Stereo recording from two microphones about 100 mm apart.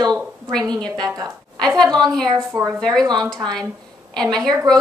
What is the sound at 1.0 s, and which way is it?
Speech, 40° right (ahead or behind).